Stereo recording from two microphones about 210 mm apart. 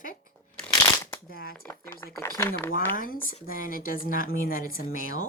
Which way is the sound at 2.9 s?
40° left (ahead or behind).